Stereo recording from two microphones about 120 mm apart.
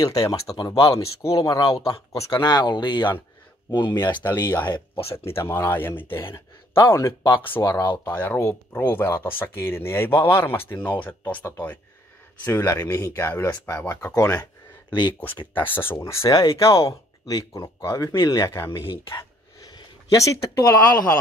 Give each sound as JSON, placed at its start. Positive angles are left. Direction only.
{"t": 0.0, "sound": "speech", "side_deg": 30}
{"t": 1.6, "sound": "speech", "side_deg": 50}
{"t": 1.9, "sound": "speech", "side_deg": 25}
{"t": 2.3, "sound": "speech", "side_deg": 40}
{"t": 4.2, "sound": "speech", "side_deg": 20}
{"t": 4.6, "sound": "speech", "side_deg": 40}
{"t": 5.1, "sound": "speech", "side_deg": 20}
{"t": 15.5, "sound": "speech", "side_deg": 15}
{"t": 18.7, "sound": "speech", "side_deg": 45}
{"t": 19.7, "sound": "speech", "side_deg": 25}